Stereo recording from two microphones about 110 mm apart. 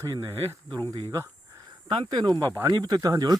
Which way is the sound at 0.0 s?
30° right (ahead or behind).